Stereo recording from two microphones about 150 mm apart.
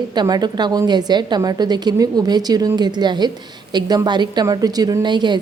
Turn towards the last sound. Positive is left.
turn(degrees=-30)  # may be behind; listen again after turning